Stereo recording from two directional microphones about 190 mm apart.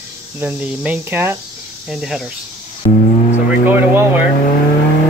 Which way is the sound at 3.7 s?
10° right (ahead or behind).